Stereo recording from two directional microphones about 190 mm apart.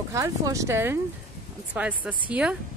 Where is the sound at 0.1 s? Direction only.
15° right (ahead or behind).